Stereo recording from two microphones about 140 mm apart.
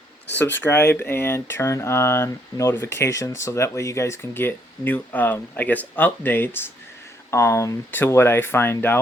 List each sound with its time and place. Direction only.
0.3 s speech: 15° left (ahead or behind)